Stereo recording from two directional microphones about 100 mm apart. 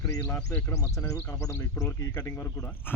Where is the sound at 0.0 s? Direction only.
30° left (ahead or behind).